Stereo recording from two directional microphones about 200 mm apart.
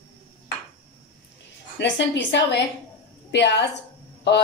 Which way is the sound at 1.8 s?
60° left (ahead or behind).